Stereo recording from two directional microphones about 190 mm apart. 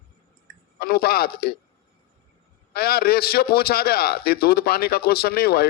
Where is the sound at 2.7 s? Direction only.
55° left (ahead or behind).